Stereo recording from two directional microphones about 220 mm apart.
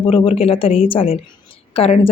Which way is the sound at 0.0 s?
25° left (ahead or behind).